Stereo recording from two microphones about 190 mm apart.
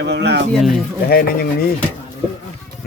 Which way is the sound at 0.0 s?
65° right (ahead or behind).